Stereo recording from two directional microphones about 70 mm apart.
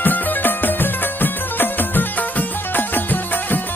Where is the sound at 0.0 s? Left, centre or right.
Left.